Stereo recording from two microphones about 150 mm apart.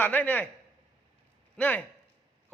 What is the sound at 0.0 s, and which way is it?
Speech, 10° left (ahead or behind).